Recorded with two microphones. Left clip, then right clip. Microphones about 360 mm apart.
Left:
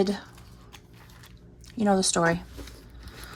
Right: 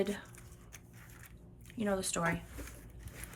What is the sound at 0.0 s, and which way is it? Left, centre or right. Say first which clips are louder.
Speech: left 9 dB; centre.